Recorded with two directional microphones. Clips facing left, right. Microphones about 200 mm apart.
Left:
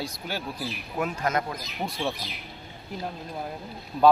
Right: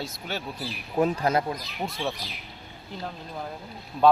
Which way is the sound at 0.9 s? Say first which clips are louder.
Right 5 dB; 30° right (ahead or behind).